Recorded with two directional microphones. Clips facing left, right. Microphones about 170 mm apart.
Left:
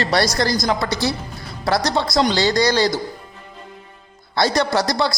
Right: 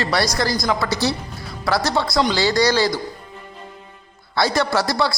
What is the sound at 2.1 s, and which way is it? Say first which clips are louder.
Speech: left 1 dB; 30° left (ahead or behind).